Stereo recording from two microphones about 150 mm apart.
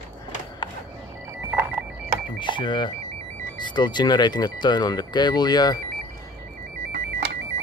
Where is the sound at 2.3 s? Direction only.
30° left (ahead or behind).